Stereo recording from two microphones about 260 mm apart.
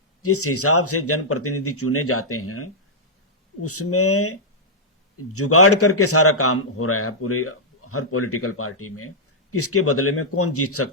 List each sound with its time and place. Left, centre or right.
0.2 s a man's voice: left